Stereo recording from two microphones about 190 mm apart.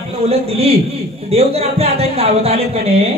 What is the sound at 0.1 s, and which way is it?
A man's voice, 30° right (ahead or behind).